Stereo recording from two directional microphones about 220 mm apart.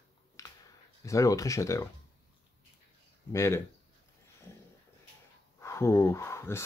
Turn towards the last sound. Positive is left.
turn(degrees=10)  # may be behind; listen again after turning